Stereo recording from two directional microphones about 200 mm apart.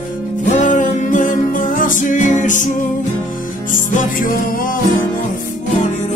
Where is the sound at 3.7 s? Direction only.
45° left (ahead or behind).